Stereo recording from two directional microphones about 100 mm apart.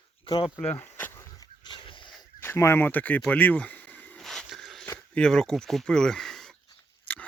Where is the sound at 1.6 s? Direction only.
50° left (ahead or behind).